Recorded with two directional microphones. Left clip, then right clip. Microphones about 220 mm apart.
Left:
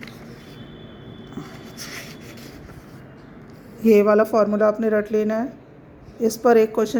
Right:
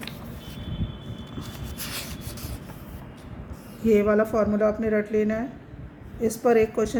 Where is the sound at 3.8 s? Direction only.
30° left (ahead or behind).